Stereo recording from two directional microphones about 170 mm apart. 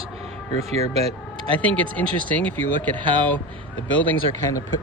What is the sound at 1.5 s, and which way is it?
Speech, 10° left (ahead or behind).